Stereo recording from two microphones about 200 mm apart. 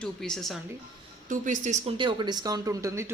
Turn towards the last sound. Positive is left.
turn(degrees=-15)  # may be behind; listen again after turning